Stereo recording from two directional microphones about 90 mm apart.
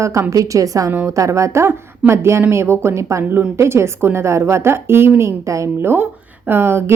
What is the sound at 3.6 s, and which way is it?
Speech, 30° right (ahead or behind).